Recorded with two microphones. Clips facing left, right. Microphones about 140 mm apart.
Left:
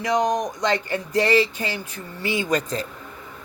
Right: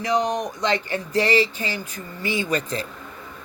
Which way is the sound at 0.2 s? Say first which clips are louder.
Left 2 dB; 45° left (ahead or behind).